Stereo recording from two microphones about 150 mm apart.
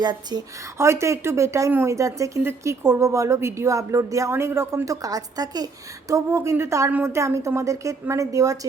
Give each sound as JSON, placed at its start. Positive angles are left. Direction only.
{"t": 0.0, "sound": "a woman's voice", "side_deg": -30}